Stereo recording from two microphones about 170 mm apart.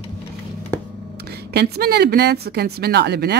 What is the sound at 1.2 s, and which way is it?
Speech, 70° right (ahead or behind).